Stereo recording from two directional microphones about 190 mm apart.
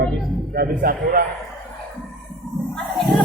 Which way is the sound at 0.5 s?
50° right (ahead or behind).